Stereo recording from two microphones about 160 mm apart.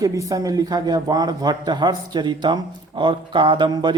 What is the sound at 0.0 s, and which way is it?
Speech, 20° right (ahead or behind).